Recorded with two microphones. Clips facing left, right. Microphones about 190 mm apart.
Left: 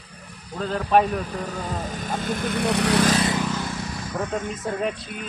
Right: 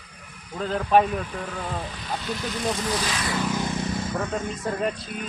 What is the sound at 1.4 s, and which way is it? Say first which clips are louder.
Speech: left 2 dB; 45° left (ahead or behind).